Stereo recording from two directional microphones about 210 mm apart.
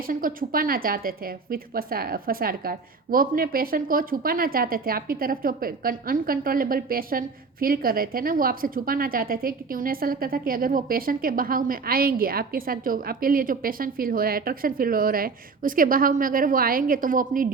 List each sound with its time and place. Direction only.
0.1 s a woman's voice: 40° right (ahead or behind)